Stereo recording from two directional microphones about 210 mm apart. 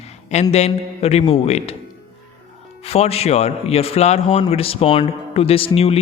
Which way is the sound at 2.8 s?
30° left (ahead or behind).